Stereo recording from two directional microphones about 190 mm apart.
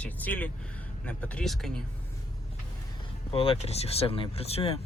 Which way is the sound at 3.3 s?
30° left (ahead or behind).